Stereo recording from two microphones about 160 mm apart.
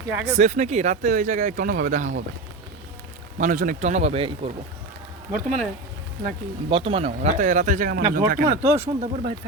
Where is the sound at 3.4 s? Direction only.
55° right (ahead or behind).